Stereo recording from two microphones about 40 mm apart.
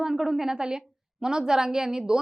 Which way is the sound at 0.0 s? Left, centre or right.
Centre.